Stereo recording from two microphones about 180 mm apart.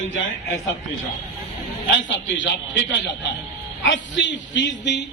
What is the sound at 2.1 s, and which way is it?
Speech, 90° left.